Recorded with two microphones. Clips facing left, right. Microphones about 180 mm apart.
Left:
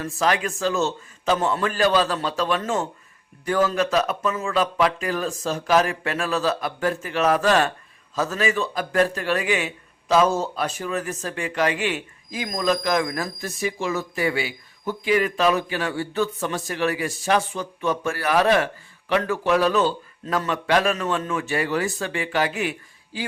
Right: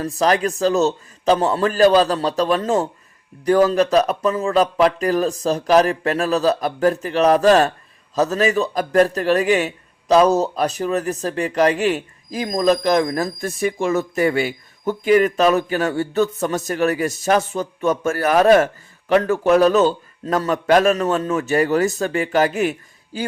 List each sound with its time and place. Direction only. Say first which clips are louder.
0.0 s a man's voice: right 5 dB; 35° right (ahead or behind)
13.6 s speech: right 6 dB; 50° right (ahead or behind)